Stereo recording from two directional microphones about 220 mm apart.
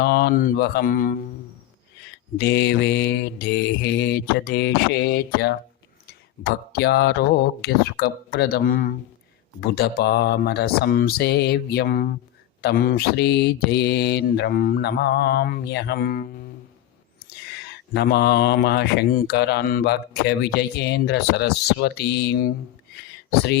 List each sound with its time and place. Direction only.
0.0 s speech: 50° left (ahead or behind)
2.4 s speech: 50° left (ahead or behind)